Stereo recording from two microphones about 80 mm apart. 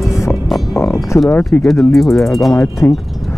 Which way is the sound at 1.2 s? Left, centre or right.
Left.